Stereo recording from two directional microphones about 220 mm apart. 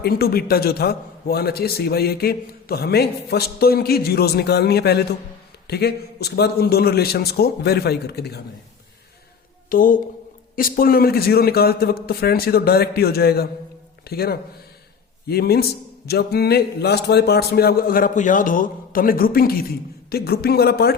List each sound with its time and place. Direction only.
0.0 s a man's voice: 45° left (ahead or behind)
9.6 s a man's voice: 40° left (ahead or behind)